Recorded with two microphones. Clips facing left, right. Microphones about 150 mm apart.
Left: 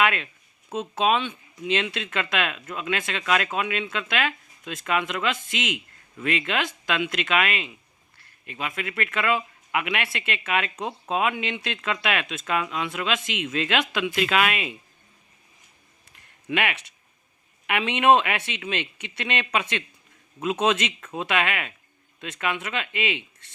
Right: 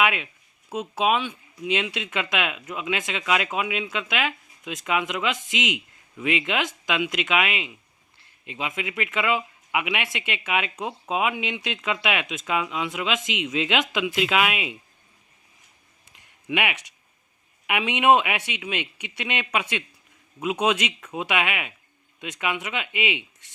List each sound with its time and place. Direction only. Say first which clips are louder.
0.0 s speech: even; 10° right (ahead or behind)
16.0 s a sound: even; 15° right (ahead or behind)
17.7 s speech: even; 15° right (ahead or behind)